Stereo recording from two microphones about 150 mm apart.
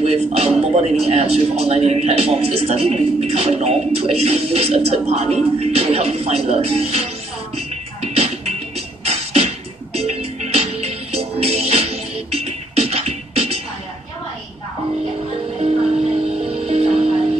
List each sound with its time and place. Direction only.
0.0 s a man's voice: 45° right (ahead or behind)
7.5 s music: 45° right (ahead or behind)
16.3 s music: 40° right (ahead or behind)